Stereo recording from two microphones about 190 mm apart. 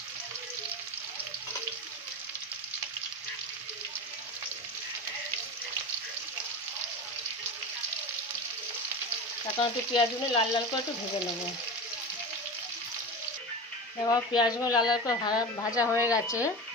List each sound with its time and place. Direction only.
9.6 s speech: 25° left (ahead or behind)
14.1 s speech: 20° left (ahead or behind)